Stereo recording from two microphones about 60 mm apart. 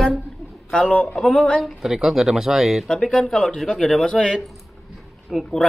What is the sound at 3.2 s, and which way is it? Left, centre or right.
Speech, centre.